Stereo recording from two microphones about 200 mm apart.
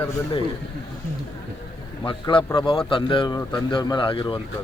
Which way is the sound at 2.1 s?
25° left (ahead or behind).